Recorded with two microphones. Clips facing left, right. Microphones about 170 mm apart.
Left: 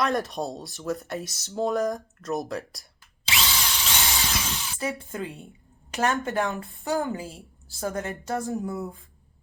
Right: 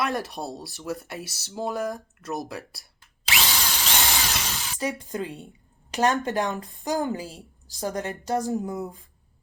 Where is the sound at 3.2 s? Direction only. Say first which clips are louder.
Right 1 dB; 75° right (ahead or behind).